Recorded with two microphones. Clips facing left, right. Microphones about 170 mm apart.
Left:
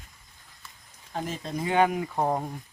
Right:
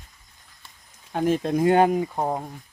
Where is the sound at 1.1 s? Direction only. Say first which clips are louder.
Right 10 dB; 60° right (ahead or behind).